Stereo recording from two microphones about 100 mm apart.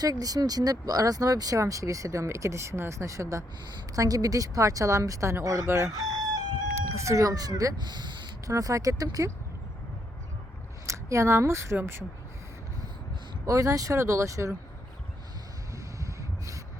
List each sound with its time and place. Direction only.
0.0 s speech: 40° right (ahead or behind)
8.4 s speech: 35° right (ahead or behind)
10.8 s speech: 30° right (ahead or behind)
13.4 s speech: 35° right (ahead or behind)
16.0 s snort: 30° right (ahead or behind)